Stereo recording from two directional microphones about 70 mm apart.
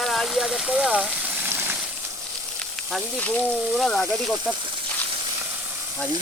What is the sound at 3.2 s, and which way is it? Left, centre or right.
Speech, centre.